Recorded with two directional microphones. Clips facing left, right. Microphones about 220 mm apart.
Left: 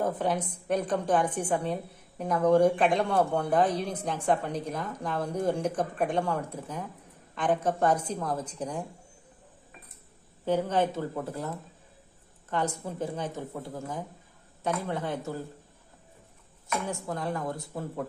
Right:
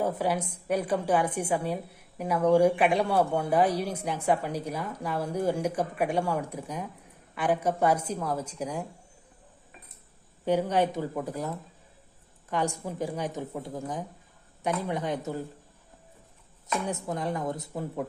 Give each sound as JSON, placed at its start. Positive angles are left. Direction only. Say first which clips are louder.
{"t": 0.0, "sound": "a woman's voice", "louder": "even", "side_deg": -10}
{"t": 10.4, "sound": "a woman's voice", "louder": "right 1 dB", "side_deg": -15}
{"t": 16.8, "sound": "speech", "louder": "right 2 dB", "side_deg": -20}